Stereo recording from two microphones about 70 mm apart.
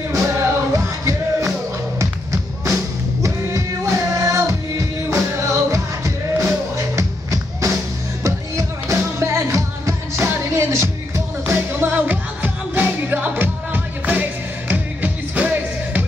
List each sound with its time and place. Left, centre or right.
0.1 s music: right